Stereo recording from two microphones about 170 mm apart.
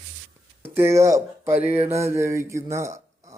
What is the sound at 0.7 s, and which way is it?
A man's voice, 15° right (ahead or behind).